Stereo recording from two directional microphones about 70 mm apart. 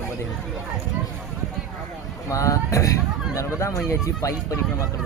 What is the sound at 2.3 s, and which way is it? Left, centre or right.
Speech, left.